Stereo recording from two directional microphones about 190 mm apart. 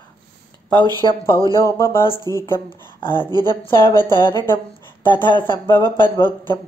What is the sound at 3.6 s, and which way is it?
Speech, 10° left (ahead or behind).